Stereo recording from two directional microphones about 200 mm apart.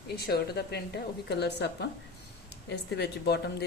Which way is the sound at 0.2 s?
55° left (ahead or behind).